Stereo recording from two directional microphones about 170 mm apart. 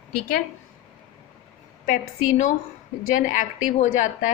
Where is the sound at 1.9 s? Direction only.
55° left (ahead or behind).